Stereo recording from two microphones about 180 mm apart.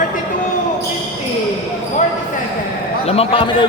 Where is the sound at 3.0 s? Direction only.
35° left (ahead or behind).